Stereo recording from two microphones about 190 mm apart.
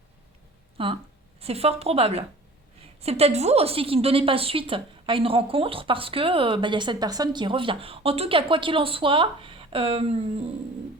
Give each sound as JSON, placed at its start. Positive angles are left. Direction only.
{"t": 0.8, "sound": "a woman's voice", "side_deg": -30}